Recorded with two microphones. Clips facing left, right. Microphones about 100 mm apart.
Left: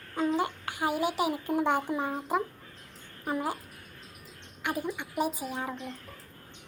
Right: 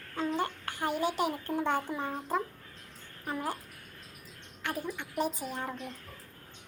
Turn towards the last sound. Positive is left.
turn(degrees=5)  # may be behind; listen again after turning